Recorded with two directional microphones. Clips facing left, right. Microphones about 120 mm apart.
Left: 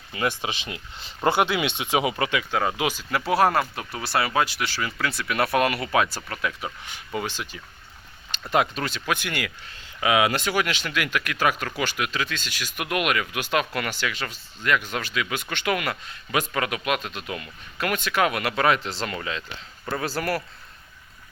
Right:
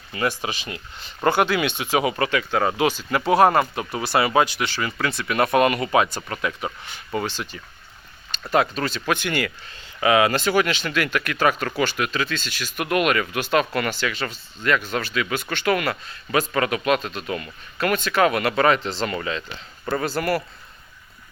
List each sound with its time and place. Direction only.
0.1 s speech: 15° left (ahead or behind)
2.6 s speech: 5° left (ahead or behind)
6.8 s speech: 10° left (ahead or behind)